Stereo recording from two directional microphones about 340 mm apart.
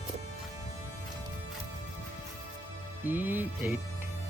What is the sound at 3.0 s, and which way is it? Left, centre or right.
Music, centre.